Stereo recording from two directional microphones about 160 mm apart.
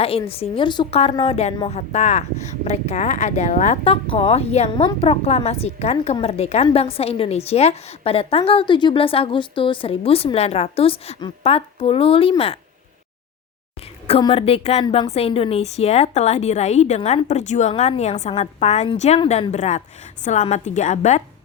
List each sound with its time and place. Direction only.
0.0 s a woman's voice: 35° left (ahead or behind)
3.8 s a woman's voice: 35° left (ahead or behind)
14.1 s a woman's voice: 35° left (ahead or behind)